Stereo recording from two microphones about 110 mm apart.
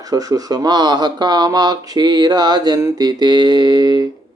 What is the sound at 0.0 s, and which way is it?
Speech, 35° right (ahead or behind).